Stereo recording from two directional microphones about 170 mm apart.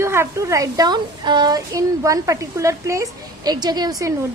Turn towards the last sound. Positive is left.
turn(degrees=-20)  # may be behind; listen again after turning